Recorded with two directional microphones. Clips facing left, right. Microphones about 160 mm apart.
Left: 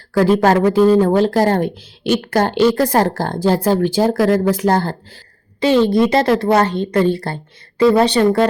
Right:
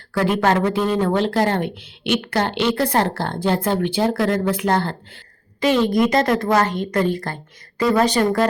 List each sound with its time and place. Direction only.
0.1 s speech: 40° left (ahead or behind)